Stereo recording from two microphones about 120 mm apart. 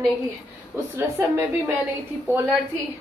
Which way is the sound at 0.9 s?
20° right (ahead or behind).